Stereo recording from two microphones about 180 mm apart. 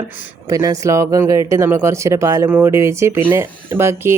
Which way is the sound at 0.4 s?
20° right (ahead or behind).